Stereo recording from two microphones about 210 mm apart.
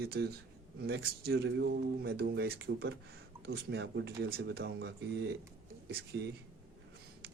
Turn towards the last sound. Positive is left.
turn(degrees=-50)  # may be behind; listen again after turning